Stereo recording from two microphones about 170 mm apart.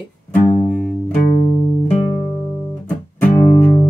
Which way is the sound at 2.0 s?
20° left (ahead or behind).